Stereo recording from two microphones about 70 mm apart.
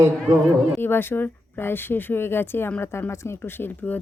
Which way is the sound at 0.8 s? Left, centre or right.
Left.